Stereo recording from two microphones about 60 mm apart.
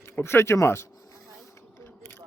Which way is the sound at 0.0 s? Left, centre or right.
Left.